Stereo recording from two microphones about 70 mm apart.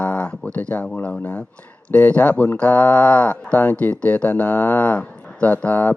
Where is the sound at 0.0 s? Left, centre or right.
Centre.